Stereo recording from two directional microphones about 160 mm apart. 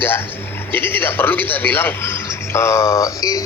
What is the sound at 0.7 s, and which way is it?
A woman's voice, 10° left (ahead or behind).